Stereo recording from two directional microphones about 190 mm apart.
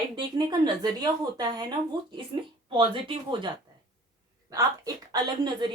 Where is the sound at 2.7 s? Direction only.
25° right (ahead or behind).